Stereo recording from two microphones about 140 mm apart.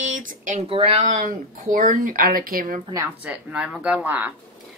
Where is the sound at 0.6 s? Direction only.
40° right (ahead or behind); by 2.8 s 90° right.